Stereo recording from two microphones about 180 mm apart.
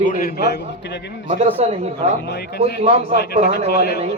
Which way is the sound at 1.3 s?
40° right (ahead or behind).